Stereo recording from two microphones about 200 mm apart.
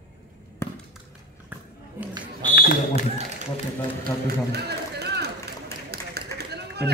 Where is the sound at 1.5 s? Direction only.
10° right (ahead or behind).